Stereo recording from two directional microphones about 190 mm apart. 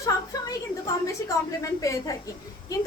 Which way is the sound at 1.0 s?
15° left (ahead or behind).